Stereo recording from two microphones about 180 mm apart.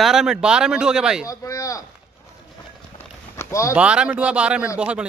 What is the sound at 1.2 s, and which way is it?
Speech, 20° left (ahead or behind).